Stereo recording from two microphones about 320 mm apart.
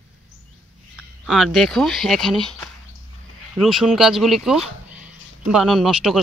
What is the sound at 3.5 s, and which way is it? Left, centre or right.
Speech, centre.